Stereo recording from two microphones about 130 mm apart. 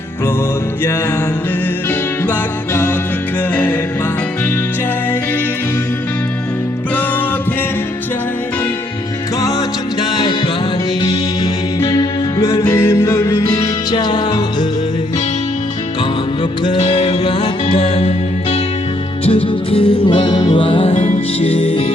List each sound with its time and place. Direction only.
3.5 s music: 10° left (ahead or behind)
9.4 s music: 30° left (ahead or behind)
13.9 s music: 35° left (ahead or behind)
16.7 s music: 55° left (ahead or behind)
19.2 s music: 45° left (ahead or behind)
20.9 s music: 75° left (ahead or behind)
21.4 s music: 45° left (ahead or behind)